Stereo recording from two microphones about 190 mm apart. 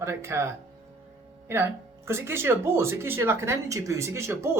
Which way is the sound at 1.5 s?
15° right (ahead or behind).